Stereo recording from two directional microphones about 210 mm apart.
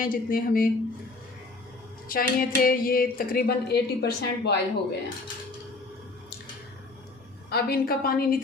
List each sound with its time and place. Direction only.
0.0 s a woman's voice: 40° left (ahead or behind)
2.0 s a woman's voice: 45° left (ahead or behind)
7.5 s a woman's voice: 45° left (ahead or behind)